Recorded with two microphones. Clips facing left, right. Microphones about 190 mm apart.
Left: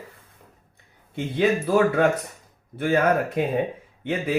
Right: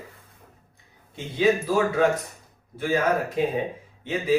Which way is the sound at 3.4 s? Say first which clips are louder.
Even; 55° left (ahead or behind).